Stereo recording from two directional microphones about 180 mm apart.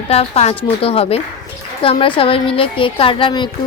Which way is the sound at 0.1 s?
35° left (ahead or behind).